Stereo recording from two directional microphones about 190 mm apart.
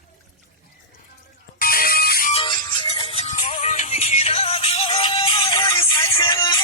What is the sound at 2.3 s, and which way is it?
Music, 25° left (ahead or behind).